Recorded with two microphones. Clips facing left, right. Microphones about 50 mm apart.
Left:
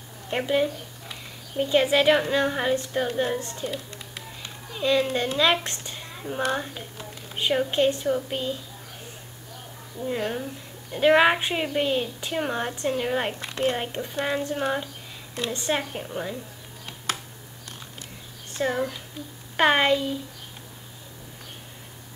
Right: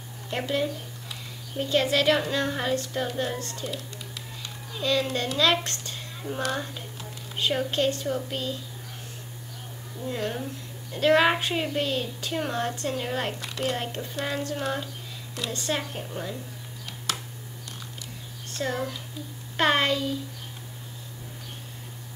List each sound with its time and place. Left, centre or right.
0.3 s a woman's voice: centre
4.1 s a sound: left
6.4 s a woman's voice: centre
9.9 s a woman's voice: centre
16.8 s a sound: left
18.5 s a child's voice: centre